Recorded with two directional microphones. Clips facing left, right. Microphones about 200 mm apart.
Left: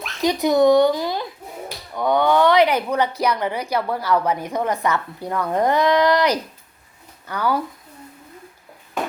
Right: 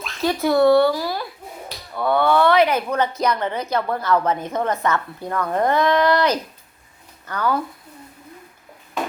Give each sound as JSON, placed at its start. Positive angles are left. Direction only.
{"t": 0.2, "sound": "a woman's voice", "side_deg": 15}